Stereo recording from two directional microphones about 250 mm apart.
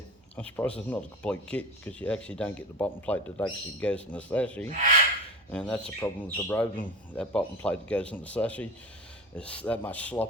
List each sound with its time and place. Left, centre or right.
0.3 s speech: centre